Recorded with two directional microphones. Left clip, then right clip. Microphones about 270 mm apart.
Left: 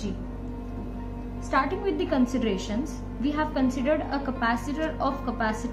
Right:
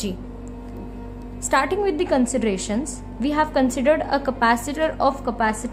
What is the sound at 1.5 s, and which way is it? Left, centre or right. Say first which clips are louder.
A woman's voice: right 6 dB; right.